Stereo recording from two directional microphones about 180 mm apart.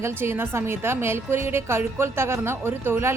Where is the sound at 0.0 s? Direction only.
15° right (ahead or behind).